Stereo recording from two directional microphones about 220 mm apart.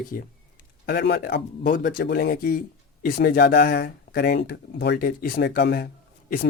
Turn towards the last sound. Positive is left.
turn(degrees=40)  # may be behind; listen again after turning